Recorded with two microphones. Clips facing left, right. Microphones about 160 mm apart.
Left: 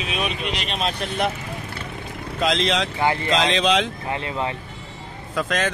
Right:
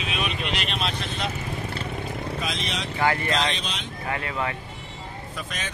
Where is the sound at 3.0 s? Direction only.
20° left (ahead or behind).